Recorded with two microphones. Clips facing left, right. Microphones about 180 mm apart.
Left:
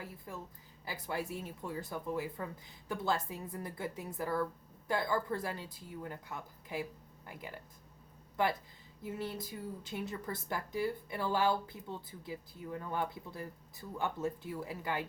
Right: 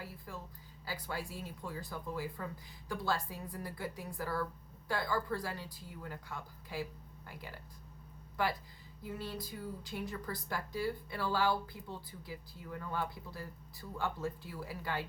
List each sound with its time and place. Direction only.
0.3 s speech: 20° left (ahead or behind)
9.0 s speech: 20° left (ahead or behind)